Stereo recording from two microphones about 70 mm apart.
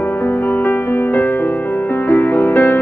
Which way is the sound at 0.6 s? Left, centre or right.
Left.